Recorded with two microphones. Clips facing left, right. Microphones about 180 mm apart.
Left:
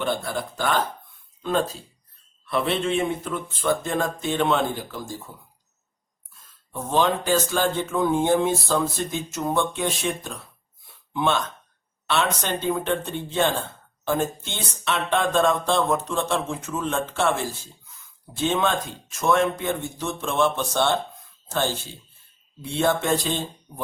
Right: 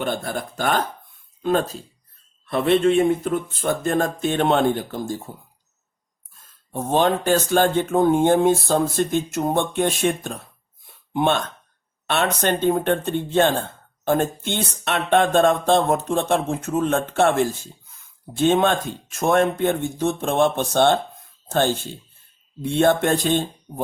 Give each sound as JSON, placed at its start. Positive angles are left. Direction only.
{"t": 0.0, "sound": "speech", "side_deg": -50}
{"t": 6.7, "sound": "speech", "side_deg": -55}